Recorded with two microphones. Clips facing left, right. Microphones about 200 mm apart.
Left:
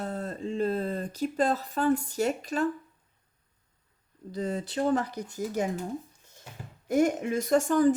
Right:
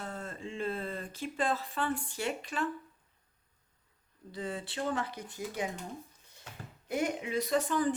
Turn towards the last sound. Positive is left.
turn(degrees=45)  # may be behind; listen again after turning